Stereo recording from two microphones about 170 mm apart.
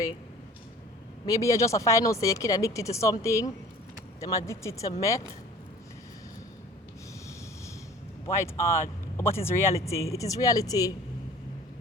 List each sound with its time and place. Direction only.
1.3 s speech: 20° left (ahead or behind)
8.3 s speech: 15° left (ahead or behind)